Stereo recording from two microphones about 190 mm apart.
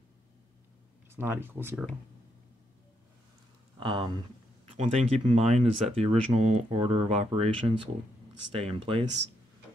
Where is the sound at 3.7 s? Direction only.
25° right (ahead or behind).